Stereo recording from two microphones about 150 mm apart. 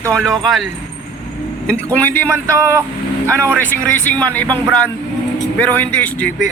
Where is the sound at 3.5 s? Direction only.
10° left (ahead or behind).